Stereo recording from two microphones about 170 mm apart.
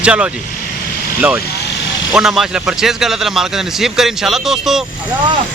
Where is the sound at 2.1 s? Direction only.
Centre (ahead or behind).